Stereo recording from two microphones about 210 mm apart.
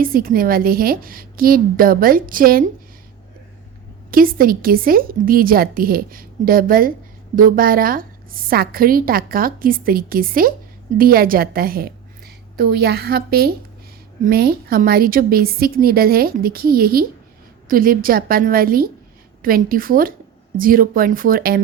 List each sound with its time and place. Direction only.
0.0 s a woman's voice: 45° right (ahead or behind)
4.1 s a woman's voice: 45° right (ahead or behind)